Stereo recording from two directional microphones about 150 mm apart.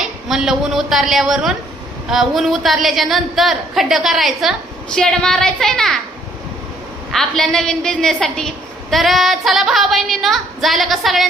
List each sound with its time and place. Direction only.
0.0 s a woman's voice: centre (ahead or behind)
7.1 s a woman's voice: 5° left (ahead or behind)